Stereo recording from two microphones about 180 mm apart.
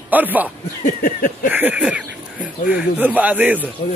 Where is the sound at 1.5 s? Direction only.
10° right (ahead or behind).